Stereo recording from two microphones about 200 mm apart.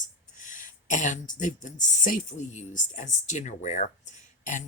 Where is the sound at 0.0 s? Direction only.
40° left (ahead or behind).